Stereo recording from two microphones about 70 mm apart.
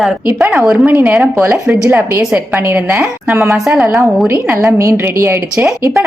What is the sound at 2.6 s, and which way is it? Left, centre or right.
Speech, right.